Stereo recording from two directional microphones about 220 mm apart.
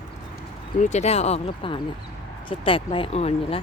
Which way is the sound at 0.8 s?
30° left (ahead or behind).